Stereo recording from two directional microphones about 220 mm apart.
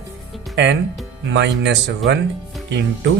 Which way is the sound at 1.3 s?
55° right (ahead or behind).